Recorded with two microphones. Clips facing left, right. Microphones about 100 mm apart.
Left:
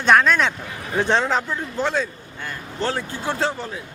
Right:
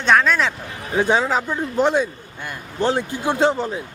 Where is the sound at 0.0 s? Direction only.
Centre (ahead or behind).